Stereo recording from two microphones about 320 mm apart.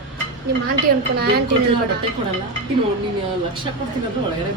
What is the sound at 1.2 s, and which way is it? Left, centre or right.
Speech, right.